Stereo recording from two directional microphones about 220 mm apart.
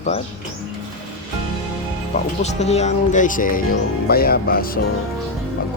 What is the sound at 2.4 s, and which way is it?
Speech, 30° left (ahead or behind).